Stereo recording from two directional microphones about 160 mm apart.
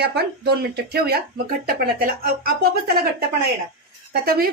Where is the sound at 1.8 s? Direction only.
65° right (ahead or behind).